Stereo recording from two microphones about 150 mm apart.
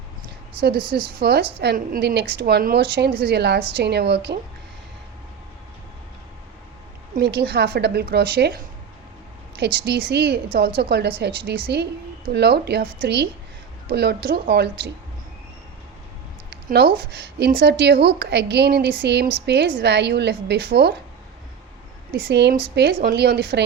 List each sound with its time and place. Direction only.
0.8 s a woman's voice: 35° right (ahead or behind)
1.2 s a woman's voice: 90° right
7.3 s a woman's voice: 90° right
16.5 s a sound: 90° right
17.0 s a woman's voice: 90° right
23.0 s a woman's voice: 90° right